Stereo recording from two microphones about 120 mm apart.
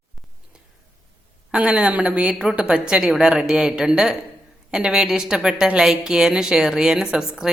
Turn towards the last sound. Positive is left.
turn(degrees=-5)  # may be behind; listen again after turning